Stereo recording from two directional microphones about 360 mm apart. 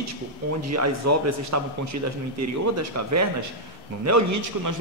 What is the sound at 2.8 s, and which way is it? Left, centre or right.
A woman's voice, right.